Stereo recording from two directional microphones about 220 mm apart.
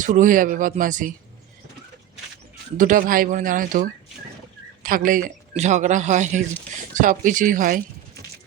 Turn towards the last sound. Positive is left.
turn(degrees=-40)  # may be behind; listen again after turning